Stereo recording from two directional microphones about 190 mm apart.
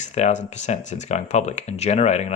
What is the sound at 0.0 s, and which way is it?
Speech, 35° left (ahead or behind).